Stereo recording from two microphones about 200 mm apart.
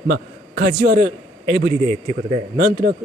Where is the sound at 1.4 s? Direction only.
30° right (ahead or behind).